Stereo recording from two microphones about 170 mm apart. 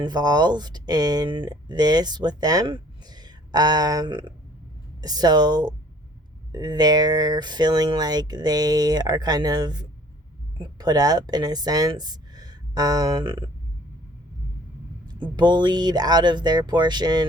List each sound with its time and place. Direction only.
0.0 s speech: 25° right (ahead or behind)
15.0 s speech: 25° right (ahead or behind)